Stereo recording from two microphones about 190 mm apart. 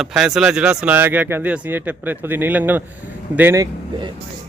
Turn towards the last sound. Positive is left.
turn(degrees=-15)  # may be behind; listen again after turning